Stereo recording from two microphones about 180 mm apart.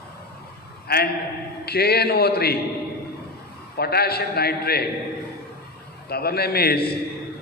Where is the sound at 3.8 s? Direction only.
60° left (ahead or behind).